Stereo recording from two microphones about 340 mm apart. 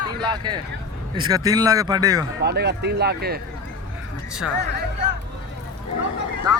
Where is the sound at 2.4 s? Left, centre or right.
Right.